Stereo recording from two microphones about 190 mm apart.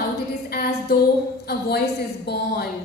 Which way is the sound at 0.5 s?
55° left (ahead or behind).